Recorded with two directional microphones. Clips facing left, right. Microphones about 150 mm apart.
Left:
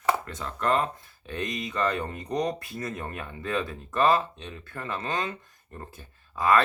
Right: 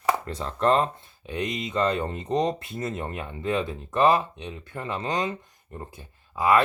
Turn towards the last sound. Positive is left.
turn(degrees=-15)  # may be behind; listen again after turning